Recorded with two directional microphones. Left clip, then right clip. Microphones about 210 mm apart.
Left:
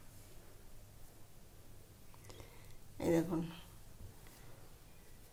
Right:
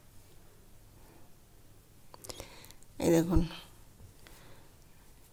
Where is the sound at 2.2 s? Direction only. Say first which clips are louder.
Right 11 dB; 50° right (ahead or behind).